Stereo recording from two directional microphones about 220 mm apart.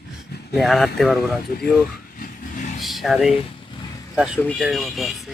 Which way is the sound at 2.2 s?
35° left (ahead or behind).